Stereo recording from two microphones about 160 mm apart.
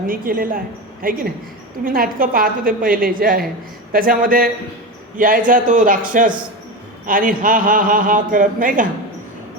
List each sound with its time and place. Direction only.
0.1 s a man's voice: 60° right (ahead or behind)